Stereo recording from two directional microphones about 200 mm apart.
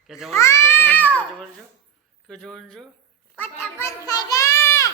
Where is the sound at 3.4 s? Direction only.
15° left (ahead or behind).